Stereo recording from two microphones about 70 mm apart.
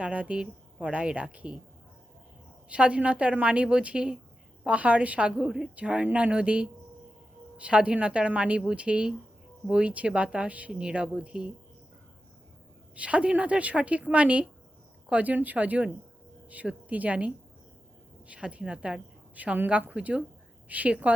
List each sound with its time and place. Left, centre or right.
0.0 s a woman's voice: centre
2.6 s a woman's voice: centre
13.0 s a woman's voice: centre